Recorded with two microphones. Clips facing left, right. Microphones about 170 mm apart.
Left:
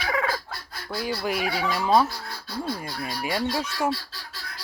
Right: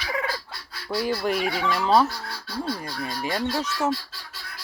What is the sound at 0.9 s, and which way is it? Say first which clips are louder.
Speech: right 3 dB; centre (ahead or behind).